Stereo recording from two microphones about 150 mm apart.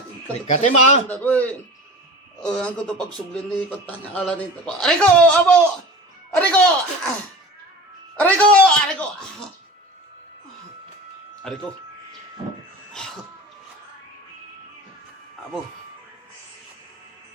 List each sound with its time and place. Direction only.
0.4 s a man's voice: 50° left (ahead or behind)
1.0 s a man's voice: 10° left (ahead or behind)
8.1 s a man's voice: 10° left (ahead or behind)
11.5 s speech: 5° left (ahead or behind)
12.4 s a sound: 30° right (ahead or behind)
12.9 s music: 5° left (ahead or behind)